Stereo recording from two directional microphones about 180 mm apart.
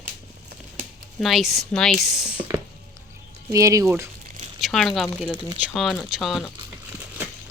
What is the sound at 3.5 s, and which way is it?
Speech, 20° right (ahead or behind).